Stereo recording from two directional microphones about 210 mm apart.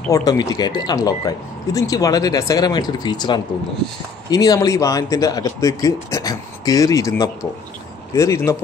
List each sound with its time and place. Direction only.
0.1 s speech: 15° left (ahead or behind)